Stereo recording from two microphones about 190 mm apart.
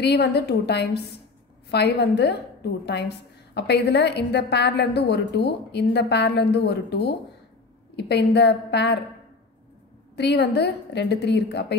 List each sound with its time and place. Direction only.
0.0 s a woman's voice: 60° left (ahead or behind)
10.1 s a woman's voice: 60° left (ahead or behind)